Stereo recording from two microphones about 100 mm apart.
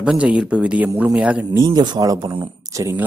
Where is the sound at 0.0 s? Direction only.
10° right (ahead or behind).